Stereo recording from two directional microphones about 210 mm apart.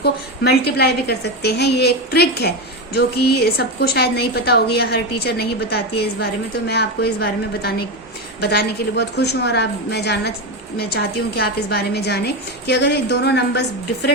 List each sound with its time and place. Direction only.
0.0 s a woman's voice: 50° left (ahead or behind)